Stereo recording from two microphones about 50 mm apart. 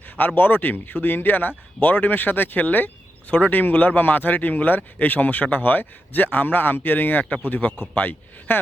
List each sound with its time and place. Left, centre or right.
0.2 s speech: left
8.5 s speech: left